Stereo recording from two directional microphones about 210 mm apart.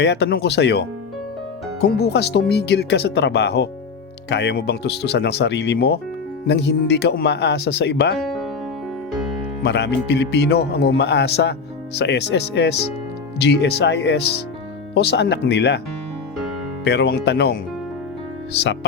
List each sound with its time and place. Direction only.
0.0 s speech: 55° left (ahead or behind)
8.2 s music: centre (ahead or behind)
9.6 s speech: 55° left (ahead or behind)
16.8 s speech: 55° left (ahead or behind)